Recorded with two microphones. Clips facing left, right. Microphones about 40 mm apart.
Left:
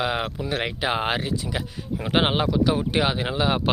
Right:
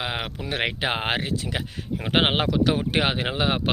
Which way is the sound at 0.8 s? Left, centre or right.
Right.